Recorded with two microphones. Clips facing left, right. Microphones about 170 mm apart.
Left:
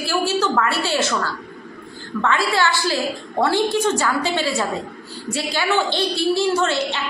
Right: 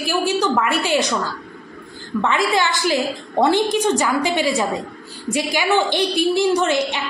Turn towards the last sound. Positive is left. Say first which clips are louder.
# right 2 dB
turn(degrees=-15)  # may be behind; listen again after turning